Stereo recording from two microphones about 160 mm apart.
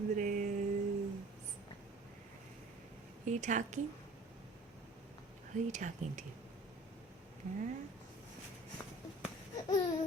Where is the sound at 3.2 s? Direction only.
50° right (ahead or behind).